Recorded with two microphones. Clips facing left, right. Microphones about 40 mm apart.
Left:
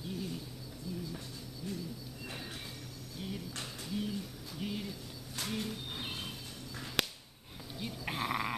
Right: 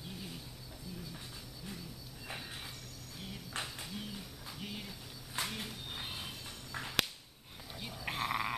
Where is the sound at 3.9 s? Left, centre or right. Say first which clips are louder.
Left 7 dB; centre.